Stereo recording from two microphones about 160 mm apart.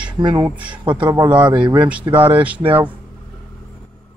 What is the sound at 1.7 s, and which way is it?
Speech, 10° right (ahead or behind).